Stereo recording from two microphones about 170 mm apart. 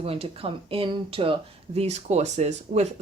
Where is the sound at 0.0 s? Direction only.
35° right (ahead or behind).